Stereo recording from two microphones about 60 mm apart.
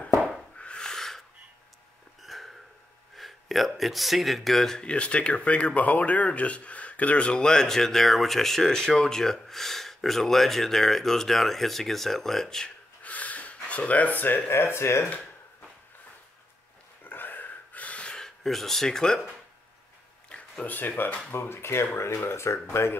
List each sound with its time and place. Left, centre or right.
0.6 s a sound: centre
2.2 s hiccup: centre
3.2 s speech: centre
13.0 s speech: left
17.0 s gasp: left; by 19.2 s centre
20.2 s a sound: centre
20.6 s speech: left